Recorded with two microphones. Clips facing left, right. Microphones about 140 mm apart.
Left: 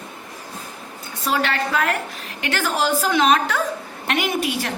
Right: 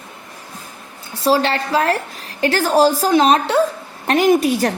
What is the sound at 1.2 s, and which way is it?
A woman's voice, 30° right (ahead or behind).